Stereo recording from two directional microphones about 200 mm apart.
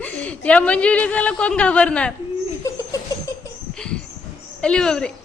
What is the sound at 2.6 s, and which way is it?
Laughter, 15° left (ahead or behind).